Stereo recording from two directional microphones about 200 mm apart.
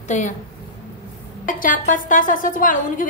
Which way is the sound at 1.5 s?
40° left (ahead or behind).